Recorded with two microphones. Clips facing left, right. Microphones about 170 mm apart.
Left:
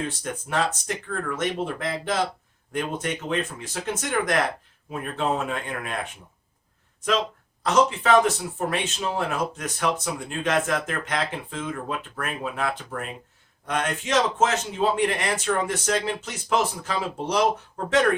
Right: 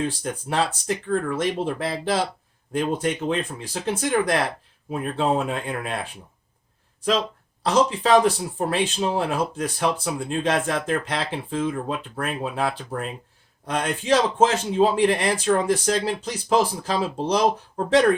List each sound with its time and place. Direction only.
0.1 s speech: 30° right (ahead or behind)
7.6 s speech: 30° right (ahead or behind)